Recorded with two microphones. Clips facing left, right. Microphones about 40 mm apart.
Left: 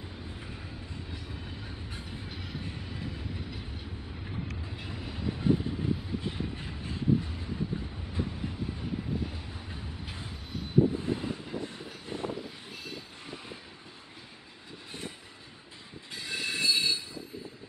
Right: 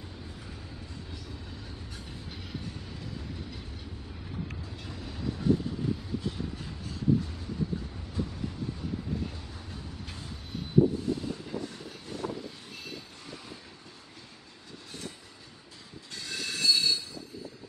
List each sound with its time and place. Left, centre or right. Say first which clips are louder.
1.1 s train: left 1 dB; left
2.3 s train: right 1 dB; centre
2.6 s train: left 2 dB; left
4.6 s train: left 1 dB; left
8.1 s vehicle: right 1 dB; left
11.0 s vehicle: even; left
14.9 s train: left 1 dB; left
16.2 s train: left 2 dB; centre